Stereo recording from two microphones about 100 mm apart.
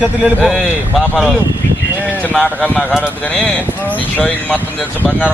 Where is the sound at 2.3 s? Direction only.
5° left (ahead or behind).